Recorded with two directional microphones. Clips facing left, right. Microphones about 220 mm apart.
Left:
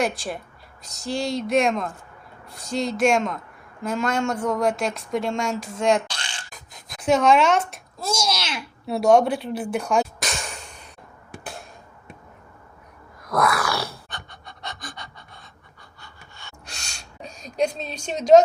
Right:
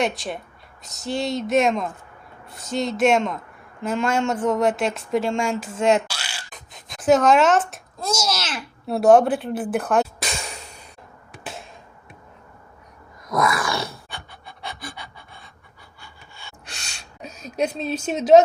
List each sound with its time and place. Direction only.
0.9 s a child's voice: centre (ahead or behind)
4.4 s speech: 25° right (ahead or behind)
4.6 s a child's voice: 5° right (ahead or behind)
13.3 s pant: centre (ahead or behind)
16.7 s a sound: 5° right (ahead or behind)